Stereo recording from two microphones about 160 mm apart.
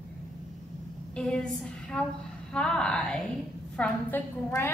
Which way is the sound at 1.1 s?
5° left (ahead or behind).